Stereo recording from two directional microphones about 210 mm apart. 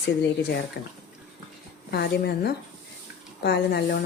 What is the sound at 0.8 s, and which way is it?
Speech, 50° left (ahead or behind).